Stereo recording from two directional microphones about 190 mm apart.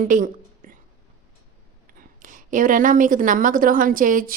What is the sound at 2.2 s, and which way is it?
A woman's voice, 45° right (ahead or behind).